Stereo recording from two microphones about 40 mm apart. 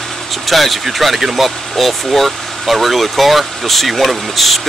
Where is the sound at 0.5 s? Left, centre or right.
Centre.